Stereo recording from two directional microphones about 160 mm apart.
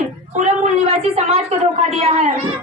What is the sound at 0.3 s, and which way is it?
A woman's voice, 50° right (ahead or behind).